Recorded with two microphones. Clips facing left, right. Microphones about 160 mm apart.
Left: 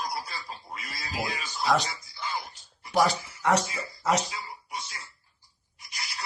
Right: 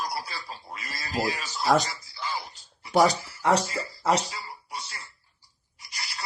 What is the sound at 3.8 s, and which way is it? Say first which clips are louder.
Speech: right 2 dB; 30° right (ahead or behind).